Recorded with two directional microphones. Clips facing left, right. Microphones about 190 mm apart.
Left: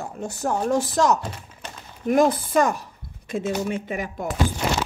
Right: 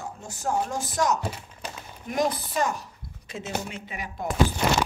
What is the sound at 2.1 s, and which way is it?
Speech, 55° left (ahead or behind).